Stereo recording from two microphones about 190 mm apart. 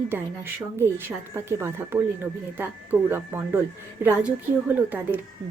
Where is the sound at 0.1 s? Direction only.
10° right (ahead or behind).